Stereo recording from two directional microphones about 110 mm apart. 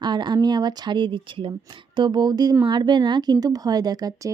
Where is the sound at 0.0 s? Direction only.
40° right (ahead or behind).